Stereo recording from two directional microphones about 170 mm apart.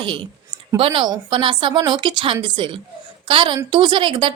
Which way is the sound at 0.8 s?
30° right (ahead or behind).